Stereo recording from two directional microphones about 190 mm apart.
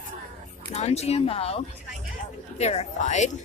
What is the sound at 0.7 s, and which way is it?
Speech, 35° left (ahead or behind).